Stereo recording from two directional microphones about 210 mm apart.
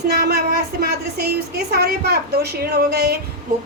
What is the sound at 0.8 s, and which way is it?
A woman's voice, 50° right (ahead or behind).